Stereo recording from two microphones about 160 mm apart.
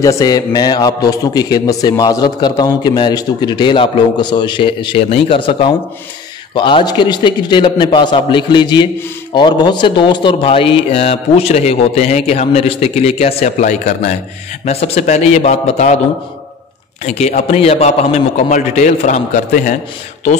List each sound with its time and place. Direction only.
0.0 s a man's voice: 20° left (ahead or behind); by 16.0 s 45° left (ahead or behind)
17.0 s a man's voice: 45° left (ahead or behind)